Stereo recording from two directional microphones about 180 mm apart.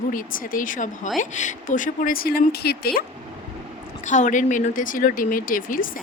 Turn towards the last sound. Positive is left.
turn(degrees=50)  # may be behind; listen again after turning